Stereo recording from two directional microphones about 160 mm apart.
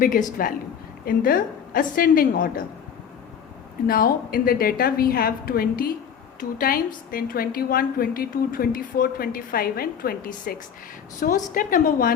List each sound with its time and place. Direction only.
0.0 s a woman's voice: 60° left (ahead or behind)
3.8 s a woman's voice: 65° left (ahead or behind)
11.2 s a woman's voice: 50° left (ahead or behind)